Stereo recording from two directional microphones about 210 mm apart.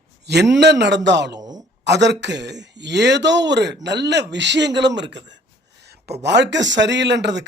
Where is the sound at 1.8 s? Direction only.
55° right (ahead or behind).